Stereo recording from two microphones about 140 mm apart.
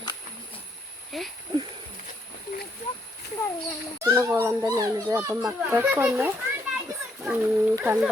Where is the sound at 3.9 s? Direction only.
20° right (ahead or behind).